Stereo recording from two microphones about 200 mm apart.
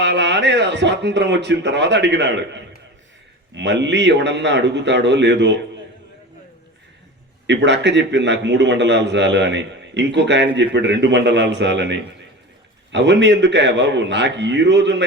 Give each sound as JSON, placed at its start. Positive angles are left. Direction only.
{"t": 0.0, "sound": "a man's voice", "side_deg": -60}
{"t": 3.5, "sound": "a man's voice", "side_deg": -60}
{"t": 7.4, "sound": "a man's voice", "side_deg": -60}